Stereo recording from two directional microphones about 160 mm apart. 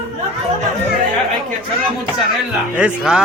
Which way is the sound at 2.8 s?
5° right (ahead or behind).